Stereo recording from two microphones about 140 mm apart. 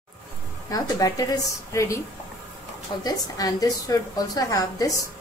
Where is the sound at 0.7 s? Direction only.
25° left (ahead or behind).